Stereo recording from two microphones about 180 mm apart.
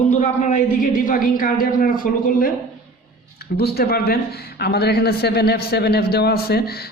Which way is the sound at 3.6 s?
60° left (ahead or behind).